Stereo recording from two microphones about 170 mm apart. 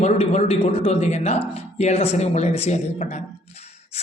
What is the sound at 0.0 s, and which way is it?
A man's voice, 40° left (ahead or behind).